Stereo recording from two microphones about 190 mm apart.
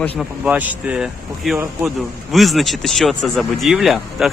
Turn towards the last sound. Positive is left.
turn(degrees=0)  # may be behind; listen again after turning